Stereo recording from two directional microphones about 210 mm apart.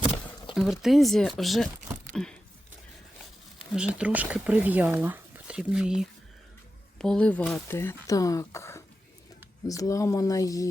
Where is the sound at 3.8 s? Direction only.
5° right (ahead or behind).